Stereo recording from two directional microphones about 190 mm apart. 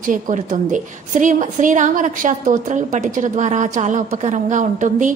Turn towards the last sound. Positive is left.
turn(degrees=-40)  # may be behind; listen again after turning